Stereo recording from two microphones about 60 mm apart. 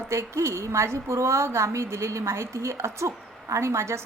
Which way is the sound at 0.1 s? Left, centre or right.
Right.